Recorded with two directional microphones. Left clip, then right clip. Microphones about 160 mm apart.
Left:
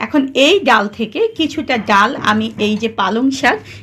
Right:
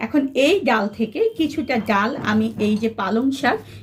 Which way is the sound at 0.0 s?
30° left (ahead or behind).